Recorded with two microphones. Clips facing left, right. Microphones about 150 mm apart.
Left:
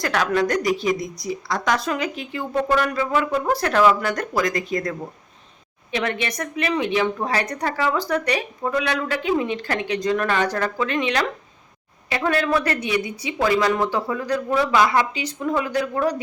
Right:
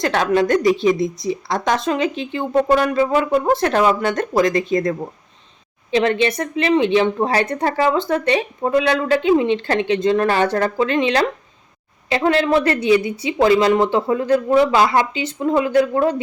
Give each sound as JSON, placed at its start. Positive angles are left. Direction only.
{"t": 0.0, "sound": "speech", "side_deg": -25}